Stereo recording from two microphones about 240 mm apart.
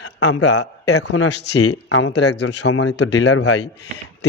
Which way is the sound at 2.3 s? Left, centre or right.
Left.